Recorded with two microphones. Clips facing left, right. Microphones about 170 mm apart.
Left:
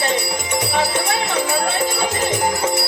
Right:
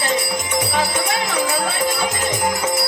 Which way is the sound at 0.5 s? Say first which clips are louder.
Left 1 dB; 30° left (ahead or behind).